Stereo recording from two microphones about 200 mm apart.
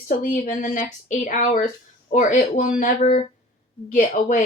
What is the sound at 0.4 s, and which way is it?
A woman's voice, 40° left (ahead or behind).